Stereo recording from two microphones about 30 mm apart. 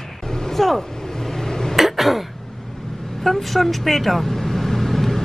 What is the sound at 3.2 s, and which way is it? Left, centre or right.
Vehicle, centre.